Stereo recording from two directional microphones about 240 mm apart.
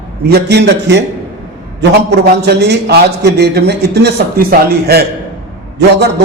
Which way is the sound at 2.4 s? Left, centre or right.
Right.